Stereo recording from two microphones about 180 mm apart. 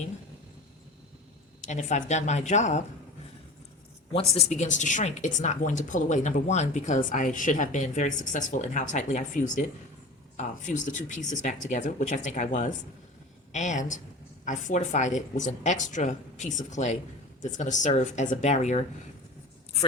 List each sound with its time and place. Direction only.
1.6 s speech: 40° left (ahead or behind)
4.4 s a woman's voice: 40° left (ahead or behind)